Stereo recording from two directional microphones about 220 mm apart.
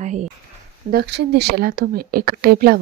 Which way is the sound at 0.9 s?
50° right (ahead or behind).